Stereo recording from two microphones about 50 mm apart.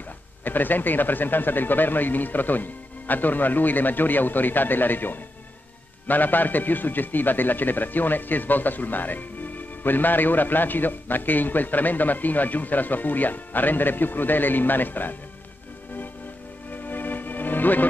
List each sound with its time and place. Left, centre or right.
0.4 s a man's voice: left
16.7 s music: left